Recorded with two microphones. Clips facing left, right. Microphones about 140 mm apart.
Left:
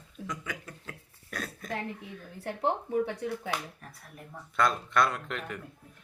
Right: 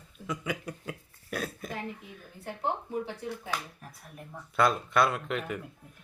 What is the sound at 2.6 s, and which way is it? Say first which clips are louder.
Speech: left 4 dB; 65° left (ahead or behind).